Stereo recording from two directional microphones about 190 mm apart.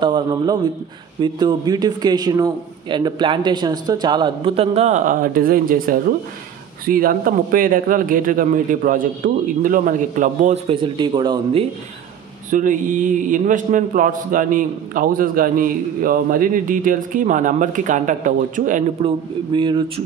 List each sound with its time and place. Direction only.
0.0 s a man's voice: 20° right (ahead or behind)
12.4 s a man's voice: 45° right (ahead or behind)
19.0 s a man's voice: 25° right (ahead or behind)